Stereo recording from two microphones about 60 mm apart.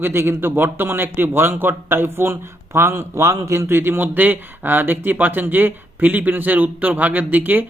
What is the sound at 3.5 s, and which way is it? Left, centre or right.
Speech, right.